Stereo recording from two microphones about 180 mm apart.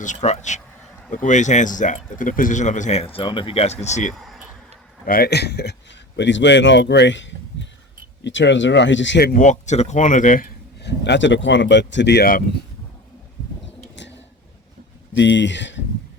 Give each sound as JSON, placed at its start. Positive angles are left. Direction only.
{"t": 0.0, "sound": "speech", "side_deg": 40}
{"t": 4.1, "sound": "a sound", "side_deg": 0}
{"t": 5.0, "sound": "a man's voice", "side_deg": 55}
{"t": 9.3, "sound": "speech", "side_deg": 45}
{"t": 10.8, "sound": "speech", "side_deg": 70}
{"t": 15.1, "sound": "speech", "side_deg": 90}